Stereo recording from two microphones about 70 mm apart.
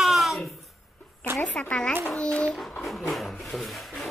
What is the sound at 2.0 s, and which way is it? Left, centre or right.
Babbling, centre.